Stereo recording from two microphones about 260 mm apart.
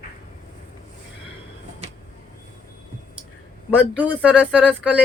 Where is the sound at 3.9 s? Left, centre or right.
Centre.